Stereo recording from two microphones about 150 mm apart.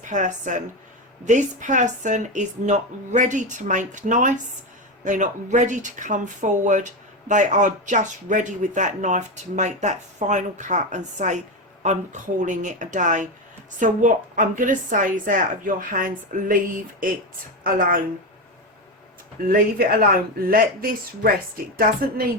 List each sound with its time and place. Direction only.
0.0 s speech: 55° right (ahead or behind)
17.6 s a woman's voice: 65° right (ahead or behind)
19.5 s speech: 75° right (ahead or behind)